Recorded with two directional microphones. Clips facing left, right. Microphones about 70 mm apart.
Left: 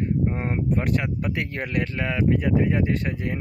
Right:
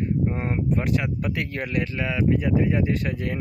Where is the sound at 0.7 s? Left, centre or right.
Left.